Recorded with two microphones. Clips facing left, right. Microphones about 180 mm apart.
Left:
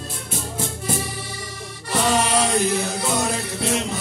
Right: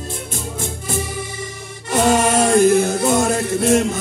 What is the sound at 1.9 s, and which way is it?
Music, 45° right (ahead or behind).